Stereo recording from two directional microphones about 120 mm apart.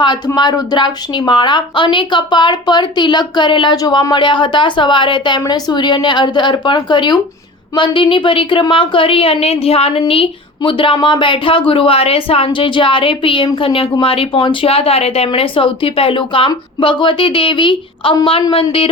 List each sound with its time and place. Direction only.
0.3 s a woman's voice: 35° left (ahead or behind)